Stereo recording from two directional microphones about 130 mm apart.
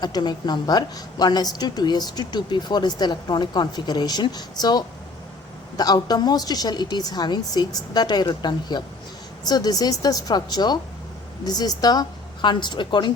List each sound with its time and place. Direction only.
0.0 s a woman's voice: 35° left (ahead or behind)